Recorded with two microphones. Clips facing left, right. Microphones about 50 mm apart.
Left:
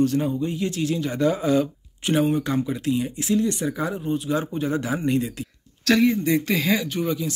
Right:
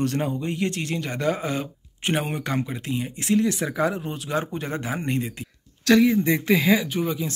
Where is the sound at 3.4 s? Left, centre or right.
Right.